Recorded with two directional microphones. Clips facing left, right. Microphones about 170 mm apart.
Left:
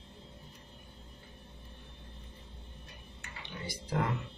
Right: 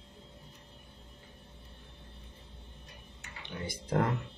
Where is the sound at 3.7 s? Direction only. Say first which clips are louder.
Right 4 dB; 50° right (ahead or behind).